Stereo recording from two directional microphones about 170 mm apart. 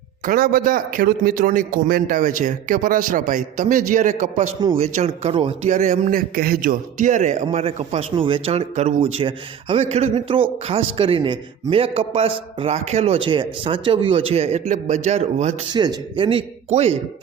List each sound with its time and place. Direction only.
0.3 s a man's voice: 60° right (ahead or behind); by 5.7 s 35° right (ahead or behind)
5.7 s a man's voice: 45° right (ahead or behind)
15.7 s speech: 25° right (ahead or behind)
16.6 s a man's voice: 40° right (ahead or behind)